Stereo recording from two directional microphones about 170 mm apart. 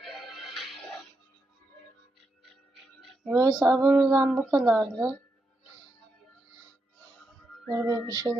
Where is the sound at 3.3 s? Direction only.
20° right (ahead or behind).